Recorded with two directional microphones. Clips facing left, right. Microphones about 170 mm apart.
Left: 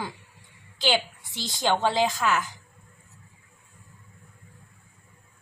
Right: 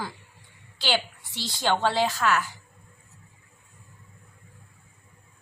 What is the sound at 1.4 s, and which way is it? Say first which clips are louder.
A woman's voice: even; 20° left (ahead or behind).